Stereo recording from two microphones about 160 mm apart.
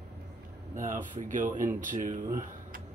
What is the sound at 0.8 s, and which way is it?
Speech, 50° right (ahead or behind).